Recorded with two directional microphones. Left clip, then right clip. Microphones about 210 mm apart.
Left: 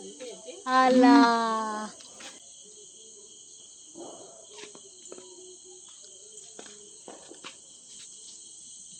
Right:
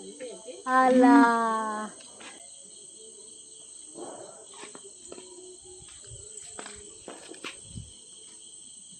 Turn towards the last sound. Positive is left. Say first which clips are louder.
# right 4 dB
turn(degrees=-50)  # may be behind; listen again after turning